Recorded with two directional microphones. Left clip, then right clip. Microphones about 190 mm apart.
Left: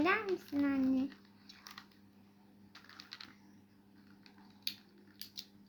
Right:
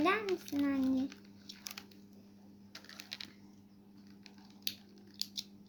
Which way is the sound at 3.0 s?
30° right (ahead or behind).